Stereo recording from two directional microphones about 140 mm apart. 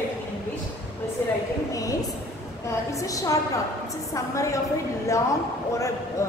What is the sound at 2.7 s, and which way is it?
A woman's voice, 25° left (ahead or behind).